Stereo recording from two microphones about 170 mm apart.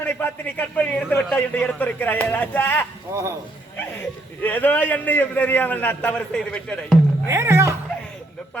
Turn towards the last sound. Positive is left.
turn(degrees=-15)  # may be behind; listen again after turning